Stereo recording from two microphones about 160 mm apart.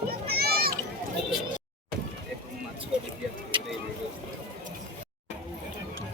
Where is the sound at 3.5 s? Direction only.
30° right (ahead or behind).